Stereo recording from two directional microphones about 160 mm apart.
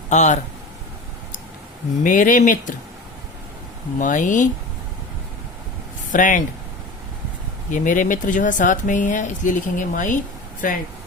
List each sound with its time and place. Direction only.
0.1 s speech: 50° left (ahead or behind)
2.0 s speech: 55° left (ahead or behind)
3.9 s speech: 50° left (ahead or behind)
6.1 s speech: 55° left (ahead or behind)
7.7 s speech: 55° left (ahead or behind)